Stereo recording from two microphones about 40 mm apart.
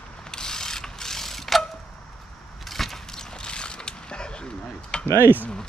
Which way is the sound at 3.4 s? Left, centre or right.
Left.